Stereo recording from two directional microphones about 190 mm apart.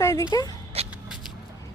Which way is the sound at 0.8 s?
30° right (ahead or behind).